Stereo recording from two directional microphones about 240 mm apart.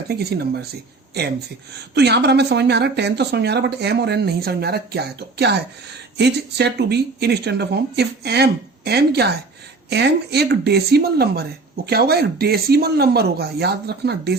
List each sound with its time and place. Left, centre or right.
0.1 s speech: right
2.0 s speech: right